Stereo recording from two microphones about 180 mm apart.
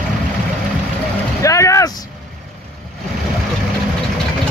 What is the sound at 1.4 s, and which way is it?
Vehicle, 15° left (ahead or behind).